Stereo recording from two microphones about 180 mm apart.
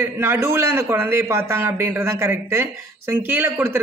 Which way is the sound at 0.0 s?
15° right (ahead or behind).